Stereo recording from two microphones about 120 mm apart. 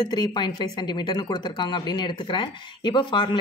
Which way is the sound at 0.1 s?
40° left (ahead or behind).